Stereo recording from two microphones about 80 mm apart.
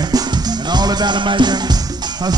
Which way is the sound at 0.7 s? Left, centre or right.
Right.